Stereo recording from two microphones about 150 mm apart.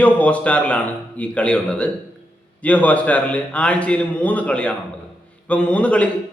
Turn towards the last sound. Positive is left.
turn(degrees=10)  # may be behind; listen again after turning